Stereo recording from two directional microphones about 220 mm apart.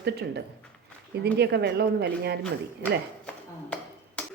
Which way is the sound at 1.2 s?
50° right (ahead or behind).